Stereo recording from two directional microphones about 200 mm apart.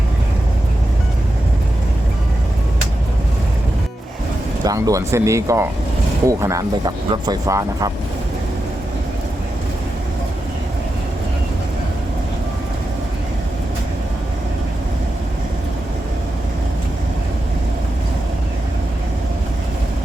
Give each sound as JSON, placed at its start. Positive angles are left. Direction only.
{"t": 4.6, "sound": "speech", "side_deg": -15}